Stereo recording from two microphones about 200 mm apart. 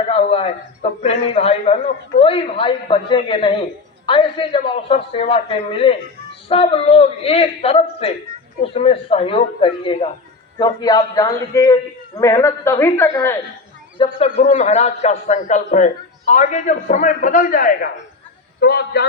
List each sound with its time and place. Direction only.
0.1 s a man's voice: 30° left (ahead or behind); by 13.3 s 15° left (ahead or behind)
14.0 s a man's voice: 30° left (ahead or behind); by 19.0 s 50° left (ahead or behind)